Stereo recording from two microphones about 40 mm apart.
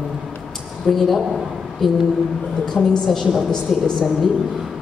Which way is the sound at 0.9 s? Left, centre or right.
Centre.